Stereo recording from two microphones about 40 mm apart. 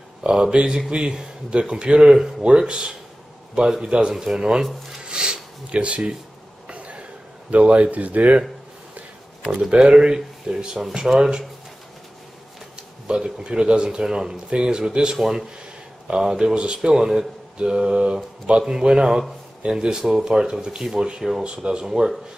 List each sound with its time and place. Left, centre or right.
0.2 s speech: right
5.0 s a sound: right
6.7 s cough: right
7.5 s speech: right
9.5 s speech: centre
13.0 s speech: right
15.1 s mantra: centre
16.2 s speech: centre
17.6 s mantra: centre
18.7 s speech: right
20.0 s speech: centre